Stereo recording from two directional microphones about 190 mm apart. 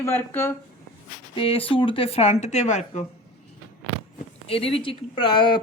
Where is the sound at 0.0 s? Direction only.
10° left (ahead or behind).